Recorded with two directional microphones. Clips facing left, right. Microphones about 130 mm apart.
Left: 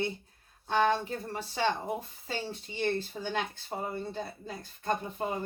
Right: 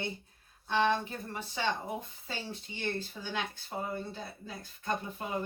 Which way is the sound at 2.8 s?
45° left (ahead or behind).